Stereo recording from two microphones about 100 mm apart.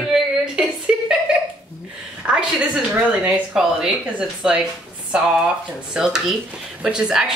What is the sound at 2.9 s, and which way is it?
Speech, 15° right (ahead or behind).